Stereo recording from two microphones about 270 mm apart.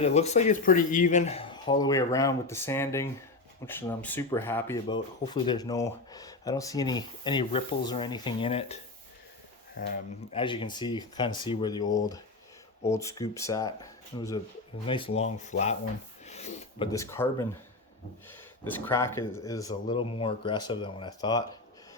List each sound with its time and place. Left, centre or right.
0.0 s speech: left
10.3 s speech: centre